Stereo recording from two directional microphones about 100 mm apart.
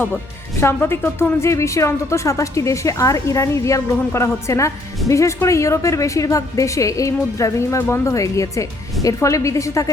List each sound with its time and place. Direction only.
0.6 s a woman's voice: 25° left (ahead or behind)